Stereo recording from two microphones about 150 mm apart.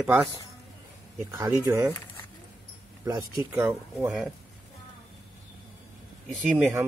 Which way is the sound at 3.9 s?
Centre (ahead or behind).